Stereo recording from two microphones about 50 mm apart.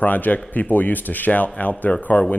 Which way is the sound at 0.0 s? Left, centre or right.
Left.